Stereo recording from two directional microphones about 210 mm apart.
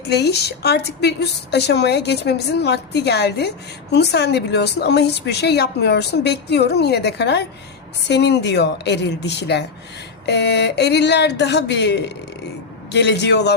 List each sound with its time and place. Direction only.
0.1 s a woman's voice: 50° left (ahead or behind)